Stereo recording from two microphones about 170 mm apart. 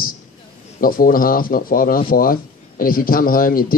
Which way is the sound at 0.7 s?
55° left (ahead or behind).